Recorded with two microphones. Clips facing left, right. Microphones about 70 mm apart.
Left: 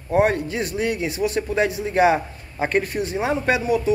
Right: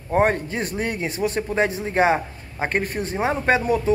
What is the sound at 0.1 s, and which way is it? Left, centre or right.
Speech, right.